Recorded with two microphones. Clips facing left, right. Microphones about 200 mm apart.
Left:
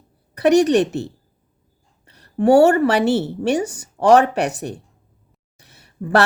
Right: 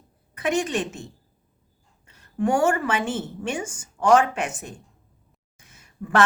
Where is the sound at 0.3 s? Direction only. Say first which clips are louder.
Left 11 dB; 40° left (ahead or behind).